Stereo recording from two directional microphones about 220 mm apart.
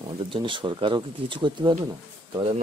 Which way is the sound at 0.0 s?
25° right (ahead or behind).